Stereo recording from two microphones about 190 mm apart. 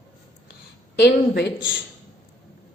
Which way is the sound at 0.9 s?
60° left (ahead or behind).